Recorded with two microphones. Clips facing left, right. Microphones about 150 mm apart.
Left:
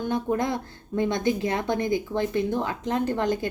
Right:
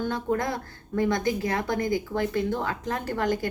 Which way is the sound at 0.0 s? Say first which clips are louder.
Left 1 dB; 20° left (ahead or behind).